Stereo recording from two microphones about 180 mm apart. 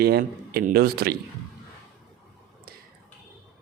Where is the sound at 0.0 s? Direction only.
60° right (ahead or behind).